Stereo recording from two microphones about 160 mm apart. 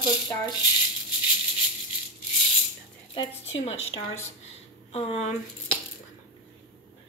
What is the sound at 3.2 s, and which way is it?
Speech, 40° left (ahead or behind).